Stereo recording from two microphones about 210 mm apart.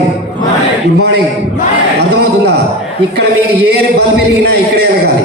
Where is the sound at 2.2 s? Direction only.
50° right (ahead or behind).